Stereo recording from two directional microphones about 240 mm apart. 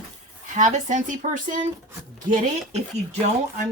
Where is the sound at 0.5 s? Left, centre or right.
Right.